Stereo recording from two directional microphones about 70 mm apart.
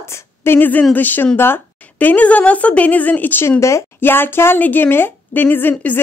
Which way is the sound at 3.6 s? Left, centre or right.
Left.